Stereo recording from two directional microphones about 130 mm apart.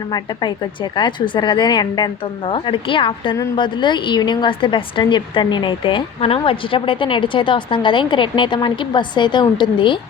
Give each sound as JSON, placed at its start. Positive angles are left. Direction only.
{"t": 0.1, "sound": "a woman's voice", "side_deg": 35}